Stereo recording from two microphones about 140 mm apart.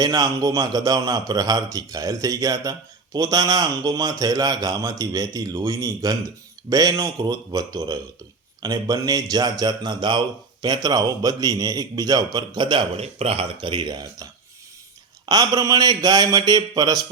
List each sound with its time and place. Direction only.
0.0 s speech: 25° right (ahead or behind)
15.3 s speech: 25° right (ahead or behind)